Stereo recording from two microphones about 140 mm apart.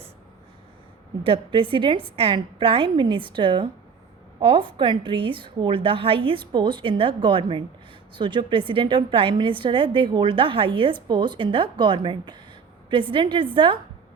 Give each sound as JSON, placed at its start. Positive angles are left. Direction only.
{"t": 1.2, "sound": "a woman's voice", "side_deg": -40}